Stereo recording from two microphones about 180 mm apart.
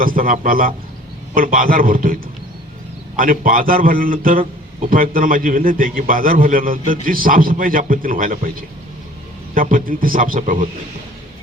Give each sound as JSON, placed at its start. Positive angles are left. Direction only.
{"t": 0.0, "sound": "a man's voice", "side_deg": -50}
{"t": 3.2, "sound": "a man's voice", "side_deg": -50}
{"t": 9.6, "sound": "a man's voice", "side_deg": -50}